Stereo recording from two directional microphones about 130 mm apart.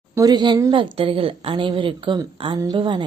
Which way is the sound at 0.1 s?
30° right (ahead or behind).